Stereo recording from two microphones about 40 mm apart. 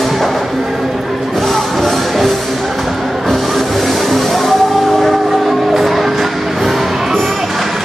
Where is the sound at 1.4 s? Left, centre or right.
Centre.